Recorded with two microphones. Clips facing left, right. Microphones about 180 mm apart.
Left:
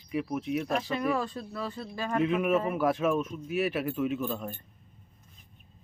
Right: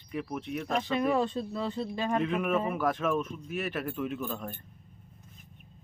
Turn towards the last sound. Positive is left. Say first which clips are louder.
# left 3 dB
turn(degrees=5)  # may be behind; listen again after turning